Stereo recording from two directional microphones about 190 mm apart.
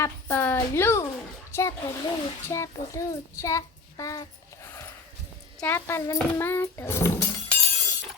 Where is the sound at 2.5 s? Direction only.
15° left (ahead or behind).